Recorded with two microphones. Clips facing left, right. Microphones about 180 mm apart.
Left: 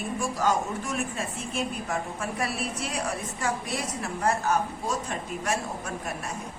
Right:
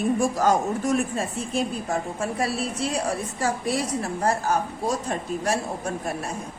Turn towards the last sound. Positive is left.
turn(degrees=-35)  # may be behind; listen again after turning